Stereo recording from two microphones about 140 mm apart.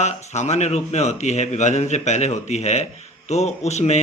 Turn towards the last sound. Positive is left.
turn(degrees=55)  # may be behind; listen again after turning